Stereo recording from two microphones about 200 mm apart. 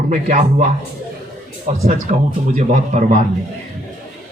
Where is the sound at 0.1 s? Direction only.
35° right (ahead or behind).